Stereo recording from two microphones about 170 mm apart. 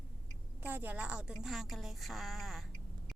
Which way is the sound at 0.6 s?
10° right (ahead or behind).